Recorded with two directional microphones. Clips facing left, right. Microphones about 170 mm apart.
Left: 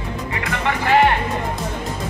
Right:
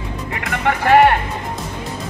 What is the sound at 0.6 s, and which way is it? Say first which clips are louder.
Speech: right 4 dB; 50° right (ahead or behind).